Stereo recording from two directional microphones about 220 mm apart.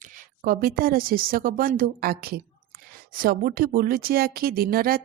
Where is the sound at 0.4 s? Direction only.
40° right (ahead or behind).